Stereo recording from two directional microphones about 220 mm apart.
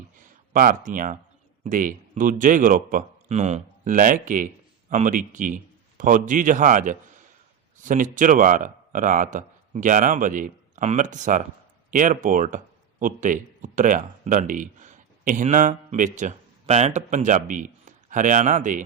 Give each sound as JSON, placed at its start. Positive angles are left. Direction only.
{"t": 0.5, "sound": "speech", "side_deg": -40}